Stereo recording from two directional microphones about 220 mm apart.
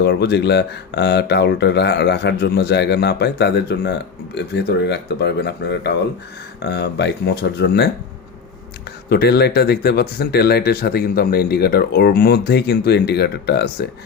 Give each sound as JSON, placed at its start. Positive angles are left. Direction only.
{"t": 0.0, "sound": "speech", "side_deg": 45}
{"t": 9.0, "sound": "speech", "side_deg": 45}